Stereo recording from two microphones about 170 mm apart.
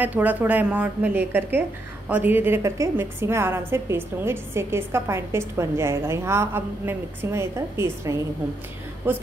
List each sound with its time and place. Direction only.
0.0 s a woman's voice: 10° right (ahead or behind)